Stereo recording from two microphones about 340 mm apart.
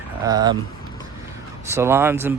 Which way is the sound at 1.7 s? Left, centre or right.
Centre.